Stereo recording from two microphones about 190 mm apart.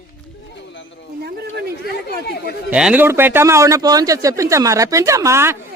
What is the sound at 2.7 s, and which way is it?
Speech, 5° right (ahead or behind).